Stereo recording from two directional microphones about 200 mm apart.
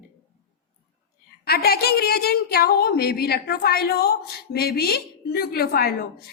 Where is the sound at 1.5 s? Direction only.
50° left (ahead or behind).